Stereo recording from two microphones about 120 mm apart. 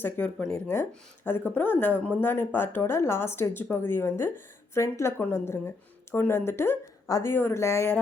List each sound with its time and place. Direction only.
0.0 s speech: 15° left (ahead or behind)